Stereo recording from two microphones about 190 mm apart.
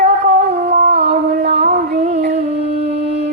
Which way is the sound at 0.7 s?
55° right (ahead or behind).